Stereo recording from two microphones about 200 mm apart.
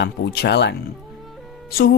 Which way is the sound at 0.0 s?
55° left (ahead or behind).